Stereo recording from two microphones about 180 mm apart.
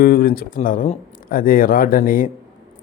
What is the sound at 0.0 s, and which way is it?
Speech, 55° left (ahead or behind).